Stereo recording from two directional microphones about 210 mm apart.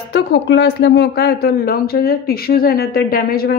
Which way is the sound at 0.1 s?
55° left (ahead or behind).